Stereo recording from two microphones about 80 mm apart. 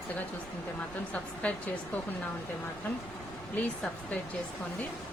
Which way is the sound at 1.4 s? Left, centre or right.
Centre.